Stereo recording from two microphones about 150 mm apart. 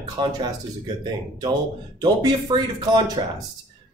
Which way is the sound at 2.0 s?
25° right (ahead or behind).